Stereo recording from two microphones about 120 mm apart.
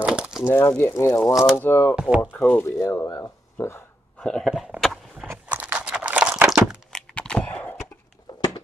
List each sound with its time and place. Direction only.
0.0 s a sound: 10° right (ahead or behind)
0.5 s speech: 25° left (ahead or behind)
1.2 s speech: centre (ahead or behind)
1.6 s speech: 20° left (ahead or behind)
2.0 s speech: 10° right (ahead or behind)
2.3 s speech: 15° left (ahead or behind)
4.2 s a sound: 5° left (ahead or behind)
5.2 s crunch: 15° right (ahead or behind)
6.9 s a sound: 10° left (ahead or behind)